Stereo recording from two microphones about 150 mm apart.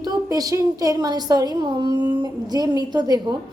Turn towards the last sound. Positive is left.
turn(degrees=-25)  # may be behind; listen again after turning